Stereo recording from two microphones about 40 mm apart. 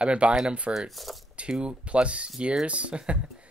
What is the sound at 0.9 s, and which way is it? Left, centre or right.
Speech, centre.